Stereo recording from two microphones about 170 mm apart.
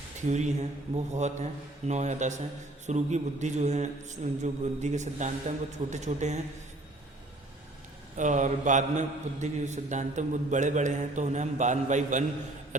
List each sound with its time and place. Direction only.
0.2 s mantra: 45° right (ahead or behind)
8.1 s mantra: 50° right (ahead or behind)